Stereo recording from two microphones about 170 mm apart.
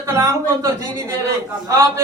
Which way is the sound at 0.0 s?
15° right (ahead or behind).